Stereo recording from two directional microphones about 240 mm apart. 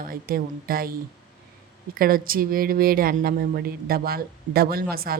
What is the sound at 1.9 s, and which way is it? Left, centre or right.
A woman's voice, right.